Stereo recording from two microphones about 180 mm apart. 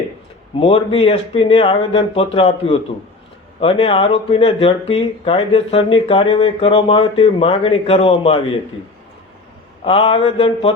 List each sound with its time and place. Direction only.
0.6 s speech: 30° left (ahead or behind)
9.8 s speech: 30° left (ahead or behind)